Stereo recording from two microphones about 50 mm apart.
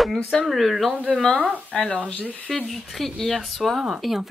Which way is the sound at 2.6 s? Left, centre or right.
Centre.